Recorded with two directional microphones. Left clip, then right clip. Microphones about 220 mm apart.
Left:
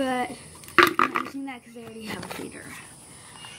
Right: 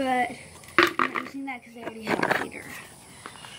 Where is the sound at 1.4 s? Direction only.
5° right (ahead or behind).